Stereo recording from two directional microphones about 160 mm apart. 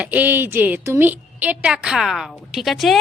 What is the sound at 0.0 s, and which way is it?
A woman's voice, 10° right (ahead or behind).